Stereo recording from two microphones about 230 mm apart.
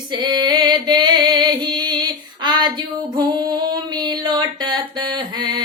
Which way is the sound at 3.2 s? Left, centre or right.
Centre.